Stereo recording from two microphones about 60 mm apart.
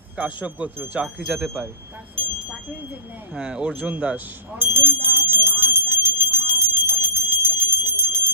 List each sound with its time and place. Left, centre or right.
0.2 s speech: right
3.3 s speech: centre
4.6 s bicycle bell: right